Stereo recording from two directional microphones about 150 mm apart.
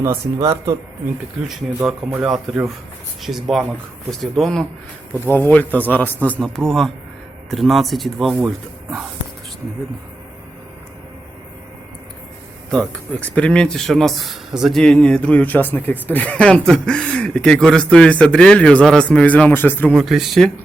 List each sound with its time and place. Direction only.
0.0 s speech: 20° right (ahead or behind)
1.9 s speech: 5° right (ahead or behind)
12.7 s speech: 5° left (ahead or behind)